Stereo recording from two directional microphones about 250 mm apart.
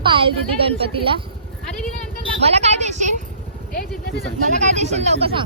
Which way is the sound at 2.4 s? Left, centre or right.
Right.